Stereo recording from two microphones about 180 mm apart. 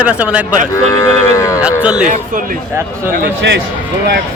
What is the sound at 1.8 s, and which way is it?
Speech, 5° right (ahead or behind).